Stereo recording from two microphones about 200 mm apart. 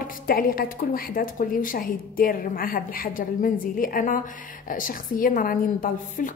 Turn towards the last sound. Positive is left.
turn(degrees=45)  # may be behind; listen again after turning